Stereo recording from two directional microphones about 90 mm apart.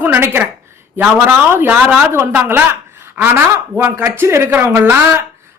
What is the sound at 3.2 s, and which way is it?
Speech, 20° right (ahead or behind).